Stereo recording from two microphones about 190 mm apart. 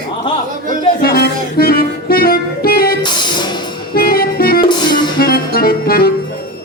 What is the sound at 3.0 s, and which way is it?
Music, 25° left (ahead or behind).